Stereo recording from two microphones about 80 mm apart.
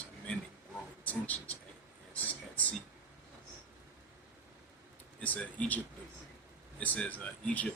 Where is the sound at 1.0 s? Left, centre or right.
Centre.